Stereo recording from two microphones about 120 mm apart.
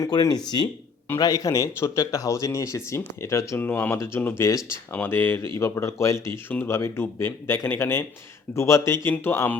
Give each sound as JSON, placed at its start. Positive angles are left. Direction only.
{"t": 0.0, "sound": "speech", "side_deg": 30}